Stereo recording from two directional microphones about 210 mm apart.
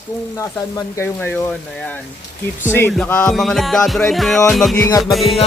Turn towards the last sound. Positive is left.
turn(degrees=0)  # may be behind; listen again after turning